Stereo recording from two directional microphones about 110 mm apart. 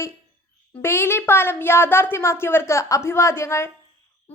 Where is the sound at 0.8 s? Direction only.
20° left (ahead or behind).